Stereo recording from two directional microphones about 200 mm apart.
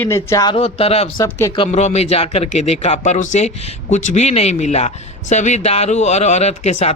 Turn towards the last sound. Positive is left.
turn(degrees=35)  # may be behind; listen again after turning